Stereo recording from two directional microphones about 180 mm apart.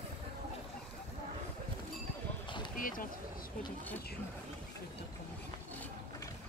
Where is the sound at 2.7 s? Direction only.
50° left (ahead or behind).